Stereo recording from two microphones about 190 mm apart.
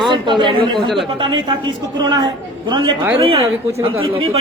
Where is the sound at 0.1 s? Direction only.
25° right (ahead or behind).